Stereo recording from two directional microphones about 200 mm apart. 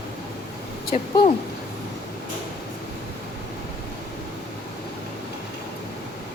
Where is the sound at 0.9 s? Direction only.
40° left (ahead or behind).